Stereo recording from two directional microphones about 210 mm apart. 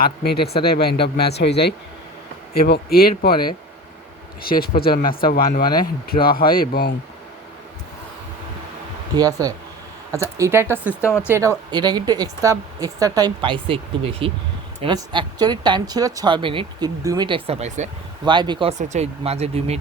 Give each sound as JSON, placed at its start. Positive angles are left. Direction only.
{"t": 0.0, "sound": "speech", "side_deg": 50}
{"t": 5.6, "sound": "speech", "side_deg": 20}
{"t": 6.1, "sound": "speech", "side_deg": 45}
{"t": 9.1, "sound": "a woman's voice", "side_deg": -15}
{"t": 18.3, "sound": "a woman's voice", "side_deg": -20}